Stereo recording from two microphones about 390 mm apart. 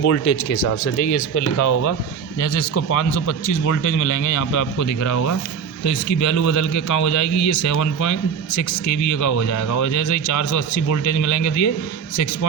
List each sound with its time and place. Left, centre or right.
0.0 s a man's voice: left
3.2 s a man's voice: left